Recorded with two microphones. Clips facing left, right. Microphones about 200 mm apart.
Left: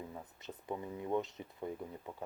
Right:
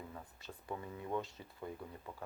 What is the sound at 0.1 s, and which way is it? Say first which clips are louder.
Speech: left 3 dB; 20° left (ahead or behind).